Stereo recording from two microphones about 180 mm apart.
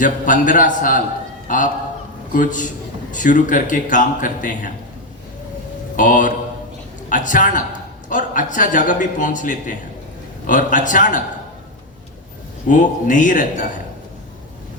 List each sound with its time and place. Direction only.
0.0 s a man's voice: 45° left (ahead or behind)
6.0 s a man's voice: 45° left (ahead or behind)
12.6 s a man's voice: 45° left (ahead or behind)